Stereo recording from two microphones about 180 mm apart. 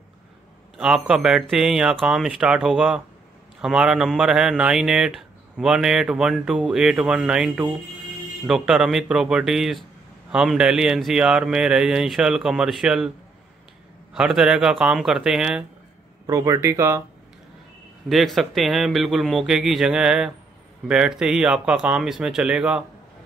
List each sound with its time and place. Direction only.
0.7 s speech: 5° right (ahead or behind)
14.1 s speech: 5° right (ahead or behind)
16.3 s speech: 20° right (ahead or behind)
18.0 s speech: centre (ahead or behind)